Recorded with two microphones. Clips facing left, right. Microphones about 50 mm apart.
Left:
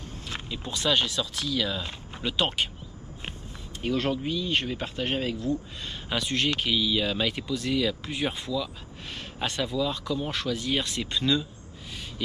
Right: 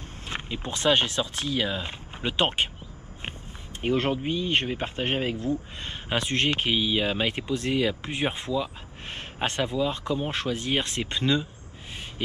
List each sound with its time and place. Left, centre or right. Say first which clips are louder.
0.3 s speech: right 3 dB; right
3.8 s speech: right 2 dB; right